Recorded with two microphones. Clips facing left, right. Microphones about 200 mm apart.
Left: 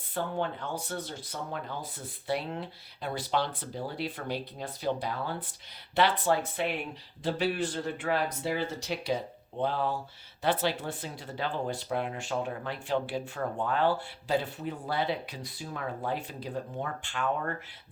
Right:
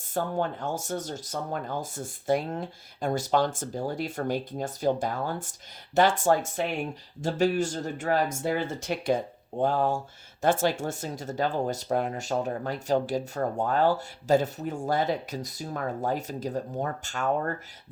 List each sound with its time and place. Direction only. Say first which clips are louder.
0.1 s speech: right 3 dB; 45° right (ahead or behind)